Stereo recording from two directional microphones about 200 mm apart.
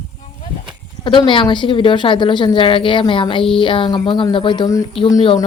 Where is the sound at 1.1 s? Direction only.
25° left (ahead or behind).